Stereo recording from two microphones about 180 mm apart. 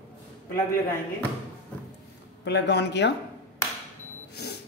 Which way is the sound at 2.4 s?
70° left (ahead or behind).